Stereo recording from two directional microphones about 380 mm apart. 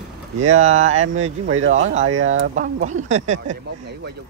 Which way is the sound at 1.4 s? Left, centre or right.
Right.